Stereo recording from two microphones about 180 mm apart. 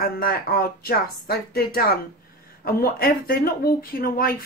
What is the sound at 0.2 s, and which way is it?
Speech, 55° left (ahead or behind).